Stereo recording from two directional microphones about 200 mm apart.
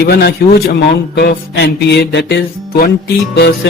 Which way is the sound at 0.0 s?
55° left (ahead or behind).